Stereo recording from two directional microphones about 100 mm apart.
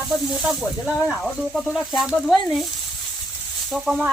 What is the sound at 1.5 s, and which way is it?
Speech, centre (ahead or behind).